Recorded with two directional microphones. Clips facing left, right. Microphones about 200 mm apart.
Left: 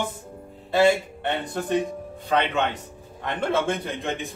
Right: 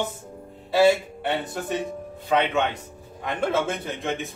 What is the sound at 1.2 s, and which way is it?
A man's voice, 10° right (ahead or behind).